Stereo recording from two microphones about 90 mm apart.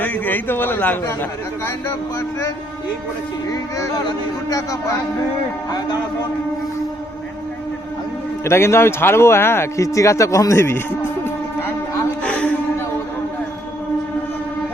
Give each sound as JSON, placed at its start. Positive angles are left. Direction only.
{"t": 0.0, "sound": "speech", "side_deg": 20}
{"t": 3.5, "sound": "speech", "side_deg": 40}
{"t": 8.4, "sound": "speech", "side_deg": 30}
{"t": 12.2, "sound": "a sound", "side_deg": 15}